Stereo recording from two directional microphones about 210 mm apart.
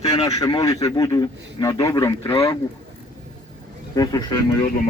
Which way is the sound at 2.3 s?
25° left (ahead or behind).